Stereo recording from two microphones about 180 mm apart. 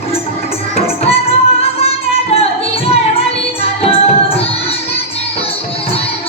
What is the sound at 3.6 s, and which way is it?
Music, 30° left (ahead or behind).